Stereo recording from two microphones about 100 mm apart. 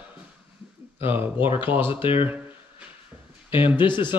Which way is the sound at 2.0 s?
60° left (ahead or behind).